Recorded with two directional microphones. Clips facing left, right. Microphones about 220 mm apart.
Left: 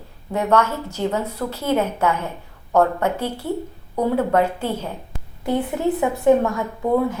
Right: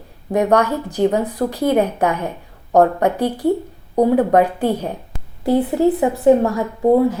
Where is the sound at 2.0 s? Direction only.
15° right (ahead or behind).